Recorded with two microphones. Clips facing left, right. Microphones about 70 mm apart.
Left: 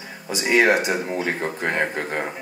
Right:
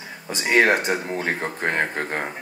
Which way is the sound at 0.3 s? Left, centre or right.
Right.